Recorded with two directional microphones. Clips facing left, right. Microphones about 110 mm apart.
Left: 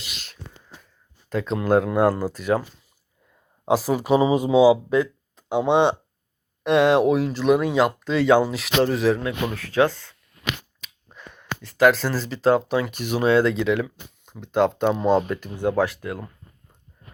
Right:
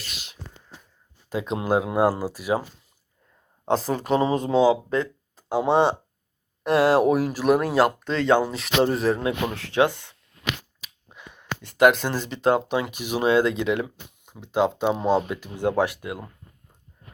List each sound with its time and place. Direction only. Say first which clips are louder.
1.3 s speech: left 3 dB; 15° right (ahead or behind)
3.7 s speech: left 3 dB; 5° left (ahead or behind)
5.4 s speech: left 1 dB; 5° right (ahead or behind)
9.5 s speech: left 3 dB; 20° right (ahead or behind)
10.8 s a sound: left 1 dB; 10° right (ahead or behind)
11.8 s speech: even; 20° right (ahead or behind)